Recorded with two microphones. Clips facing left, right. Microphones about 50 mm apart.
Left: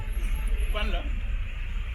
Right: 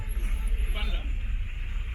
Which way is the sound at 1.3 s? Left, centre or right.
Left.